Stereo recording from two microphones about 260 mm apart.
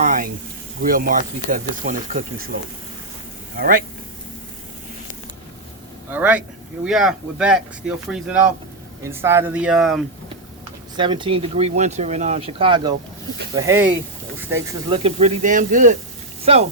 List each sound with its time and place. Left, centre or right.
0.0 s speech: right
6.1 s speech: centre
10.9 s speech: centre